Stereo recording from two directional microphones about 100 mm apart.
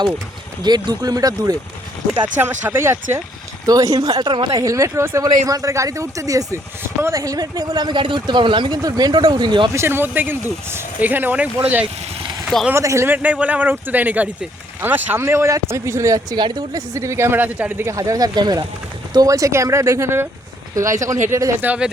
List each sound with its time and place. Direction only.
0.6 s speech: 45° right (ahead or behind)
2.2 s speech: 20° right (ahead or behind)
3.7 s speech: 35° right (ahead or behind)
4.3 s speech: 55° right (ahead or behind)
4.5 s speech: 35° right (ahead or behind); by 9.6 s 50° right (ahead or behind)
9.7 s speech: 25° right (ahead or behind)
12.7 s speech: 30° right (ahead or behind)
13.1 s speech: 15° right (ahead or behind)
17.8 s speech: 35° right (ahead or behind)
21.6 s speech: 15° right (ahead or behind)